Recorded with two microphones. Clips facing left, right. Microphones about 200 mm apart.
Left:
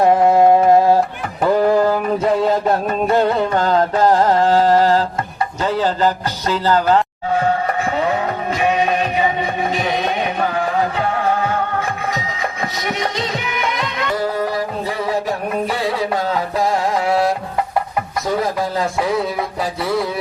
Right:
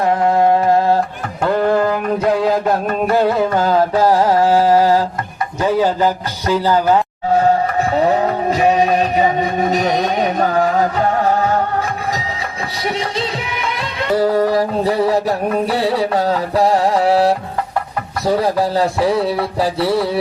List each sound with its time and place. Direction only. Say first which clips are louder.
0.3 s music: even; 20° left (ahead or behind)
1.5 s music: left 1 dB; 5° left (ahead or behind); by 5.0 s 10° right (ahead or behind)
5.6 s speech: right 3 dB; 10° right (ahead or behind)
7.9 s music: right 4 dB; 35° right (ahead or behind)
13.0 s music: right 1 dB; 30° right (ahead or behind)
18.3 s a sound: right 6 dB; 35° right (ahead or behind)